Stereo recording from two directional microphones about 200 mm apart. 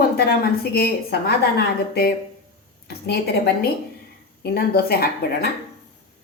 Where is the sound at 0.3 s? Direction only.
50° left (ahead or behind).